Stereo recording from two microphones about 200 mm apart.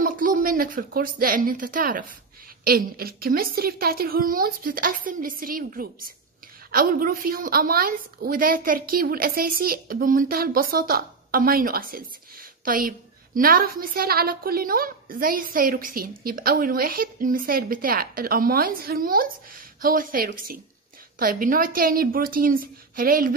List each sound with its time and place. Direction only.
0.0 s a woman's voice: 45° right (ahead or behind)